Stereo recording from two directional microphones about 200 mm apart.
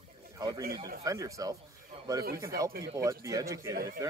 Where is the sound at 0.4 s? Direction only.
15° right (ahead or behind).